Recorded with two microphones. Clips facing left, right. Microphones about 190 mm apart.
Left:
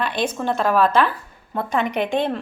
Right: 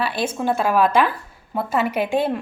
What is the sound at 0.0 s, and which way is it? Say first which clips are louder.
A woman's voice: even; 5° right (ahead or behind).